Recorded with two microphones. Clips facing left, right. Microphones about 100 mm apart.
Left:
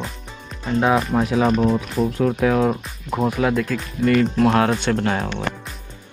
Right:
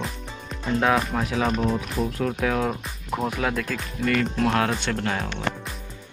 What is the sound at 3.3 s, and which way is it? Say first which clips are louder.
Speech: left 6 dB; 5° left (ahead or behind).